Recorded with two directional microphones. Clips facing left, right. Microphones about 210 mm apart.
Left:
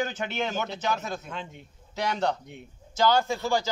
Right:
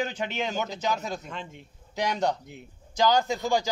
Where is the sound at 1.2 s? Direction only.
Centre (ahead or behind).